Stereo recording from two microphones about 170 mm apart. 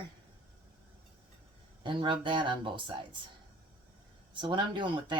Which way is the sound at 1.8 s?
30° right (ahead or behind).